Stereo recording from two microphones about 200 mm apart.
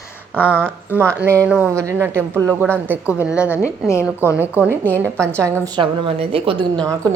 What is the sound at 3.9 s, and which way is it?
Speech, 15° left (ahead or behind).